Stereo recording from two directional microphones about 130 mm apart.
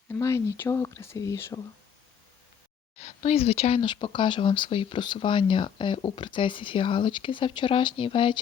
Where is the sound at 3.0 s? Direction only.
55° left (ahead or behind).